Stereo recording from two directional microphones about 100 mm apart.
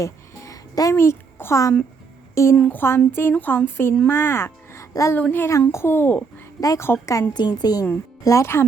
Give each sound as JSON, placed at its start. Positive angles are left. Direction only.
{"t": 0.0, "sound": "music", "side_deg": 35}
{"t": 2.3, "sound": "a woman's voice", "side_deg": 30}
{"t": 5.1, "sound": "a child's voice", "side_deg": 20}
{"t": 6.6, "sound": "a woman's voice", "side_deg": 35}
{"t": 8.2, "sound": "a child's voice", "side_deg": 30}